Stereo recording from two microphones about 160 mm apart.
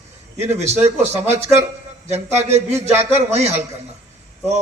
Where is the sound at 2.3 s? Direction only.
45° right (ahead or behind).